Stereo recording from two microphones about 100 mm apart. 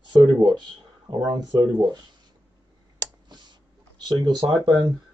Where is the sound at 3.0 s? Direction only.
45° right (ahead or behind).